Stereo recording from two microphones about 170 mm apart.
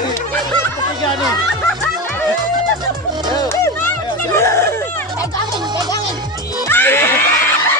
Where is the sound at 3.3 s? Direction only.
20° left (ahead or behind).